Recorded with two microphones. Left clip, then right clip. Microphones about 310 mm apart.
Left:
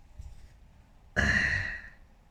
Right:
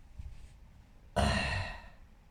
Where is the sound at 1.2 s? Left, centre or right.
Right.